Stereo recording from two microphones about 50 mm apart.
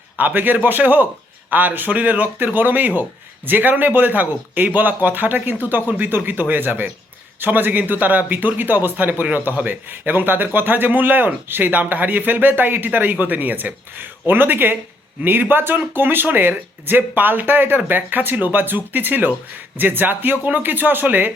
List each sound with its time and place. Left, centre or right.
0.2 s speech: right